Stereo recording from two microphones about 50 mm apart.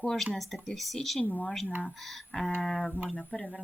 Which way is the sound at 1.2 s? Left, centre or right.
Left.